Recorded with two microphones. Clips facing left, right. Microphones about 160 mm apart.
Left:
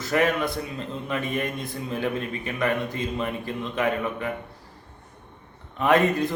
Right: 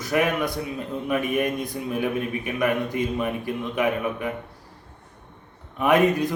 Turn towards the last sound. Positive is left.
turn(degrees=-15)  # may be behind; listen again after turning